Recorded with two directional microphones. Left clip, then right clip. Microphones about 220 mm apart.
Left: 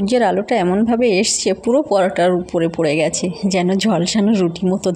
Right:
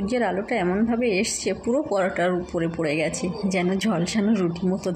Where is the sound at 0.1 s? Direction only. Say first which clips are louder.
Left 9 dB; 45° left (ahead or behind).